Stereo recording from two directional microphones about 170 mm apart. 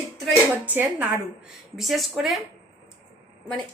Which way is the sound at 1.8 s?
Centre (ahead or behind).